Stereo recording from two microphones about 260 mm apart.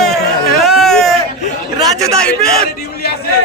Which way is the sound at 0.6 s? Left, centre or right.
Centre.